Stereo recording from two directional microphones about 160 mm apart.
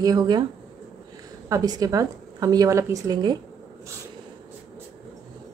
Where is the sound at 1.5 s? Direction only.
25° right (ahead or behind).